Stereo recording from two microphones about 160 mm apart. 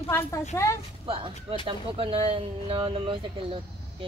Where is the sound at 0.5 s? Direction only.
15° left (ahead or behind).